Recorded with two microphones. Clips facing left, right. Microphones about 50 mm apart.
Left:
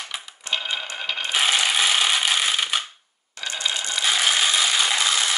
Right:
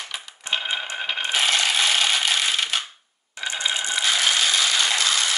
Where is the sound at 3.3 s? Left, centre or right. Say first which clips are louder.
Right 1 dB; centre.